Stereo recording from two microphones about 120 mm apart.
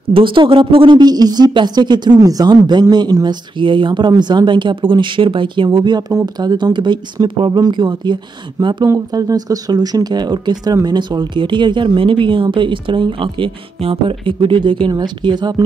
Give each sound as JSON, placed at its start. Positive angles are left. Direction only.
{"t": 0.1, "sound": "speech", "side_deg": -45}